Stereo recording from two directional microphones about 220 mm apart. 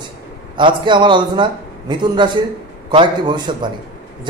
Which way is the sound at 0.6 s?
20° right (ahead or behind).